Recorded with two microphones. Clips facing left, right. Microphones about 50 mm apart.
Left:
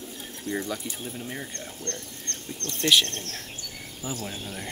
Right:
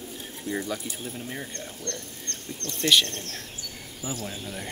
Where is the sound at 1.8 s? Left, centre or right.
Left.